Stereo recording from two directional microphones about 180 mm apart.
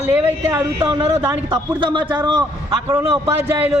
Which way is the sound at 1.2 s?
10° right (ahead or behind).